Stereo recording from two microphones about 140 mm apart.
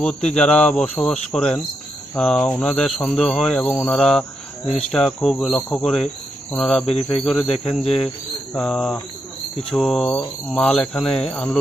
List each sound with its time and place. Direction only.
0.3 s speech: 5° left (ahead or behind)
6.8 s speech: 45° left (ahead or behind)
7.3 s speech: 5° left (ahead or behind)